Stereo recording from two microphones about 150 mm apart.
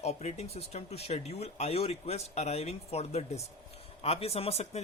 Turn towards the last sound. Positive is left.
turn(degrees=45)  # may be behind; listen again after turning